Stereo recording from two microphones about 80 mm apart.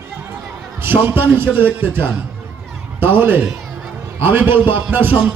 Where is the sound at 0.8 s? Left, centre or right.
Right.